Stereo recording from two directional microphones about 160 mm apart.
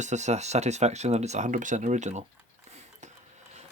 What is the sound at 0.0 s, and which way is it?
Speech, 50° right (ahead or behind).